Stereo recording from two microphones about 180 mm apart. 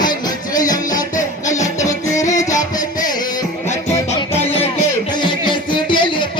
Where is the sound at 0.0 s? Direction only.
20° left (ahead or behind).